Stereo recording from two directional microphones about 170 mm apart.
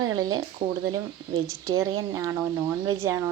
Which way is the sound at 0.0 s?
25° right (ahead or behind).